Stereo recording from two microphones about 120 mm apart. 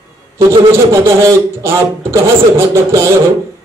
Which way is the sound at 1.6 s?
20° right (ahead or behind).